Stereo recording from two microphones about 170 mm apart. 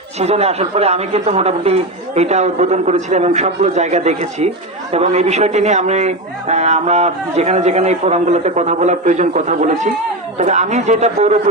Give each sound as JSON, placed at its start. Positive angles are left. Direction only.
{"t": 0.2, "sound": "a man's voice", "side_deg": -40}